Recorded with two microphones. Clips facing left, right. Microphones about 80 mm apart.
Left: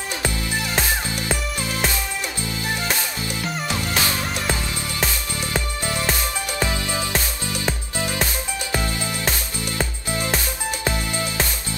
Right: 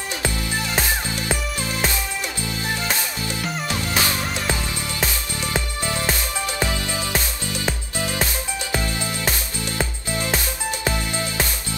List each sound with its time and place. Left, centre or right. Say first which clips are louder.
1.6 s music: even; right
3.8 s music: right 2 dB; right
5.4 s music: right 1 dB; right
6.7 s music: left 1 dB; left
8.9 s music: even; right